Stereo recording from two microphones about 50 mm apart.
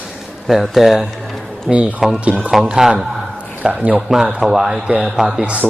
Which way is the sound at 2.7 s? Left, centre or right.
Centre.